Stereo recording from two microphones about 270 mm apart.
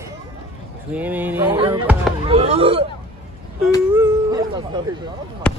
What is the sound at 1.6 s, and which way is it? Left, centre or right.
Speech, centre.